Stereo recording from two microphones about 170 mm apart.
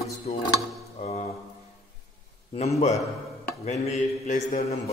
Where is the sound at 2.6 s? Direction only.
40° left (ahead or behind).